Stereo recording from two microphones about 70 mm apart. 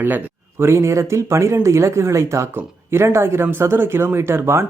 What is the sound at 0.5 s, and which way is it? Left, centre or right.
Speech, right.